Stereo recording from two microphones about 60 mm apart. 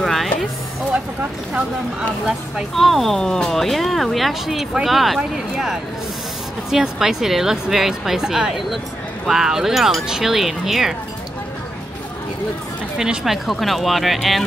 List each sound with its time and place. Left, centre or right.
0.0 s a sound: centre
2.7 s a woman's voice: centre
12.9 s a woman's voice: centre